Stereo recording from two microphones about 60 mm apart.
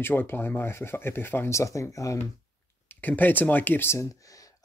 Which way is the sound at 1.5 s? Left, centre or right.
Left.